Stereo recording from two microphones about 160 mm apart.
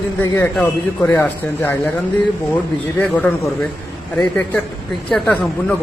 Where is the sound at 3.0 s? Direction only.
10° left (ahead or behind).